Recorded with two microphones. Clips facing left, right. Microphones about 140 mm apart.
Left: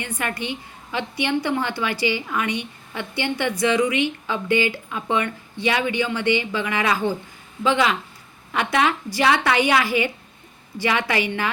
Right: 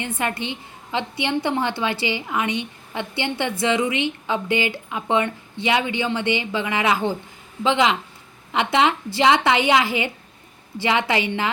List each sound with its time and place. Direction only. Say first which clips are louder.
0.2 s a woman's voice: even; 20° right (ahead or behind)